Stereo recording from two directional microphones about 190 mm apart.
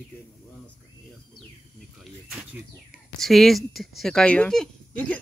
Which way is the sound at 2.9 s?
Centre (ahead or behind).